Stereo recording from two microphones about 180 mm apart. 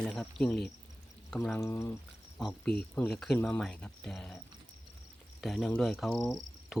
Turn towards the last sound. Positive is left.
turn(degrees=5)  # may be behind; listen again after turning